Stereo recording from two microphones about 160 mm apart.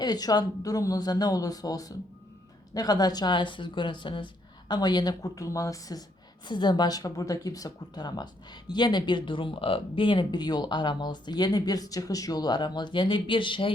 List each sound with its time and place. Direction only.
0.0 s speech: 25° left (ahead or behind)